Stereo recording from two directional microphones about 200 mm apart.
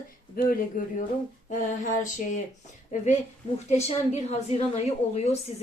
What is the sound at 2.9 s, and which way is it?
A woman's voice, 35° left (ahead or behind).